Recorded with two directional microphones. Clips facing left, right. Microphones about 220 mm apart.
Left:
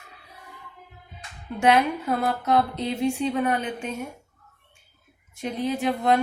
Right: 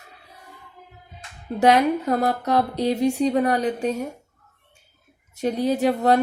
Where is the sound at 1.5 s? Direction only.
35° right (ahead or behind).